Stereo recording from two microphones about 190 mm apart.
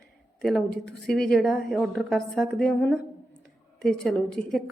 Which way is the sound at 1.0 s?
5° left (ahead or behind).